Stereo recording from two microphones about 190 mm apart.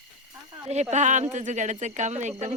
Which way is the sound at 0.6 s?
35° right (ahead or behind).